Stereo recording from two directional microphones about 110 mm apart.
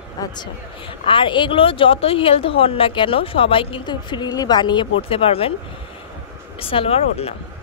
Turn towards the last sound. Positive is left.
turn(degrees=65)  # may be behind; listen again after turning